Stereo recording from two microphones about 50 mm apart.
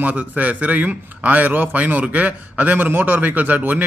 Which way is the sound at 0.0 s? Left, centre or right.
Right.